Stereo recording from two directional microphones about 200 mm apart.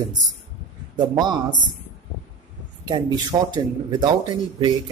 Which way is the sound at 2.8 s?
20° right (ahead or behind).